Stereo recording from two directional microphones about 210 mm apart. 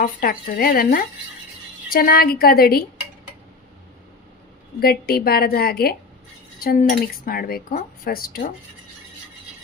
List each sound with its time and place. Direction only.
0.0 s speech: 45° left (ahead or behind)
4.8 s speech: 45° left (ahead or behind)